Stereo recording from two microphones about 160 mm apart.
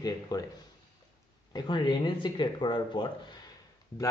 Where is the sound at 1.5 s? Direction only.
25° left (ahead or behind).